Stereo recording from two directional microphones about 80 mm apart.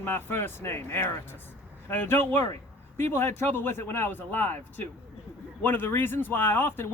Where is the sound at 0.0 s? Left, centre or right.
Left.